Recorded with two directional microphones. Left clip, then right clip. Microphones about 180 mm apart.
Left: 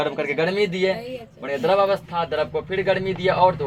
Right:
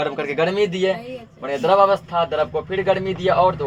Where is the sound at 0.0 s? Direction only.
Centre (ahead or behind).